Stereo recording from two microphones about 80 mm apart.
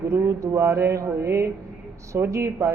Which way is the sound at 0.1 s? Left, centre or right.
Right.